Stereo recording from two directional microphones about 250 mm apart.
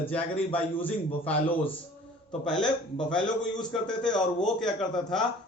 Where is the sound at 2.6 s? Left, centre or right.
Centre.